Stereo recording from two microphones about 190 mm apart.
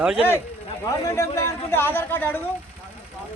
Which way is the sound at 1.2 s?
15° left (ahead or behind).